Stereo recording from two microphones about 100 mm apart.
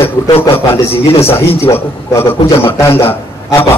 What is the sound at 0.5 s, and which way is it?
A man's voice, 25° left (ahead or behind).